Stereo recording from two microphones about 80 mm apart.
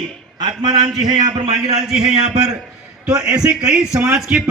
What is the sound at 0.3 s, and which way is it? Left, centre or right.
Speech, right.